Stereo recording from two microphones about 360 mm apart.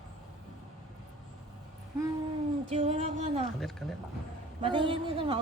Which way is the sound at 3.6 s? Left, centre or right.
Centre.